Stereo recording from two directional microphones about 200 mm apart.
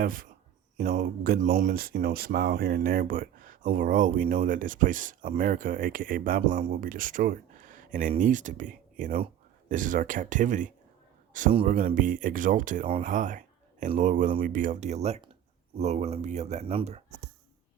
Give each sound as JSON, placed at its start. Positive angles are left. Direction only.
{"t": 0.0, "sound": "speech", "side_deg": -45}